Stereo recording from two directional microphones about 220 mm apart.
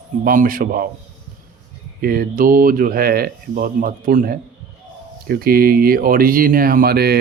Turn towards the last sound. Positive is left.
turn(degrees=-45)  # may be behind; listen again after turning